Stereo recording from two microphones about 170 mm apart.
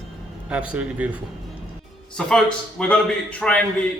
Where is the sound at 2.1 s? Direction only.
5° left (ahead or behind).